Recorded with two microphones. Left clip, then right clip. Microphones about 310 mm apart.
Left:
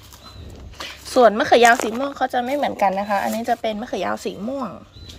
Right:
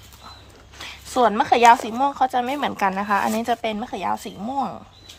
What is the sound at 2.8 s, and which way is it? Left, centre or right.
Speech, right.